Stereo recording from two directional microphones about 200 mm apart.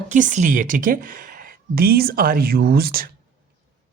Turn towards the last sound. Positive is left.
turn(degrees=-50)  # may be behind; listen again after turning